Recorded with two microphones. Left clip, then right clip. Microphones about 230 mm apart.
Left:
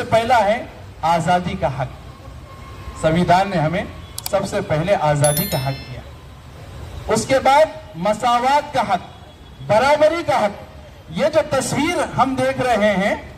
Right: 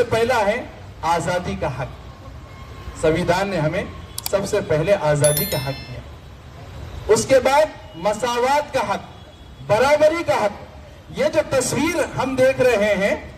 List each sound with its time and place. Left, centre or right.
0.1 s a man's voice: right
3.0 s a man's voice: right
5.2 s speech: centre
7.2 s a man's voice: right